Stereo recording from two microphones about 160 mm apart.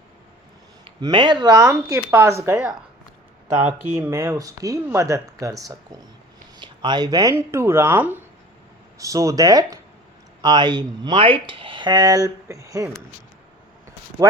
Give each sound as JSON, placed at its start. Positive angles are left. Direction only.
{"t": 0.9, "sound": "speech", "side_deg": -30}
{"t": 3.7, "sound": "speech", "side_deg": -15}